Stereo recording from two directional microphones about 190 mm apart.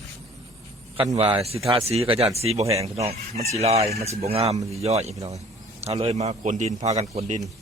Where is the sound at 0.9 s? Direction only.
30° right (ahead or behind).